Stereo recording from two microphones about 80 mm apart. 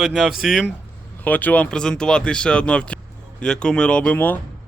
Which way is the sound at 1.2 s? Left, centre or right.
Left.